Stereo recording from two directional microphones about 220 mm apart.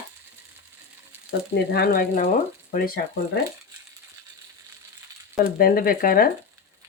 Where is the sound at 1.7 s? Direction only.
45° left (ahead or behind).